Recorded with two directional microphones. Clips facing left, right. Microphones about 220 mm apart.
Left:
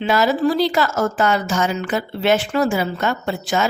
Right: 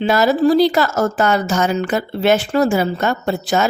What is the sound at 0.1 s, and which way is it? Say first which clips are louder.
A woman's voice: right 3 dB; 40° right (ahead or behind).